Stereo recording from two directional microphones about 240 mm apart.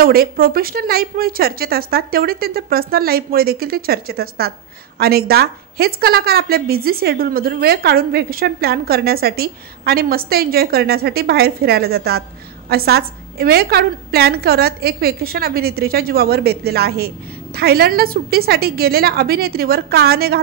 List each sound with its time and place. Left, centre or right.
0.0 s a woman's voice: right